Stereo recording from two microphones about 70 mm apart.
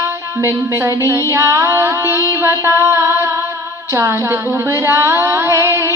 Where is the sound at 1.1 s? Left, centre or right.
Right.